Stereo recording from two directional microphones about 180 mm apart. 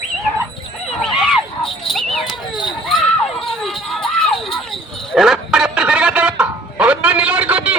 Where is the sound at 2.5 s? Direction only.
25° left (ahead or behind).